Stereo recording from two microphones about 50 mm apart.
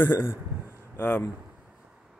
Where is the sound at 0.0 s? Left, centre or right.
Left.